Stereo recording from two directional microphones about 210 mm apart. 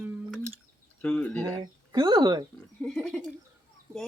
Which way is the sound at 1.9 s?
20° right (ahead or behind).